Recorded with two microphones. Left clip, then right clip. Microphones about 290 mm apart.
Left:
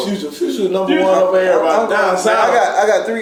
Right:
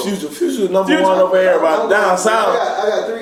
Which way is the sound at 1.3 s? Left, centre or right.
Centre.